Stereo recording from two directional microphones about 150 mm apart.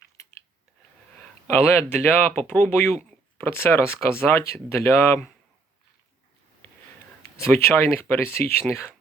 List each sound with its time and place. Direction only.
1.5 s speech: 15° left (ahead or behind)
7.6 s speech: 15° left (ahead or behind)